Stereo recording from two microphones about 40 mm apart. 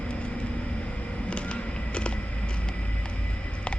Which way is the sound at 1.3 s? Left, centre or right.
Left.